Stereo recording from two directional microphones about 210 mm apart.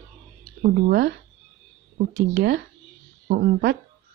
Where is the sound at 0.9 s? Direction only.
50° right (ahead or behind).